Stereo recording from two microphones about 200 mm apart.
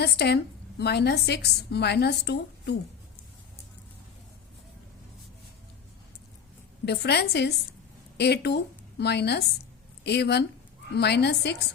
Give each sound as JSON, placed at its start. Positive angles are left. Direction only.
{"t": 0.0, "sound": "a woman's voice", "side_deg": 55}
{"t": 6.8, "sound": "a woman's voice", "side_deg": 55}